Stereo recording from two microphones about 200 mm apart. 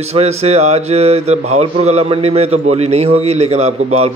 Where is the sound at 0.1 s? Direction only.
30° right (ahead or behind).